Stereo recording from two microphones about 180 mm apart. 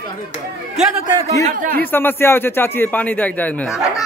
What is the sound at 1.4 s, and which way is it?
Speech, 50° right (ahead or behind).